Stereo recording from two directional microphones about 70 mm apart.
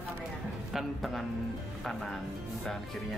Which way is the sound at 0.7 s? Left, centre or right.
Centre.